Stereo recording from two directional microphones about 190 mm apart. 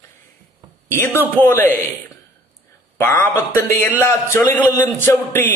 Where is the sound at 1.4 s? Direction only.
10° left (ahead or behind).